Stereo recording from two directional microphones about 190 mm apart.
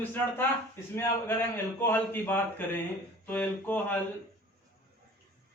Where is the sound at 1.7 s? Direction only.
10° left (ahead or behind).